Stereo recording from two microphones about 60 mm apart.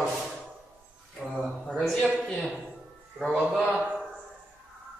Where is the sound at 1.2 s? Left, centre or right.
Right.